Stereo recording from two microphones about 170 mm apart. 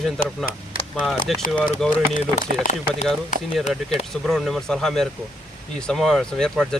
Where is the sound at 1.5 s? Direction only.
5° left (ahead or behind).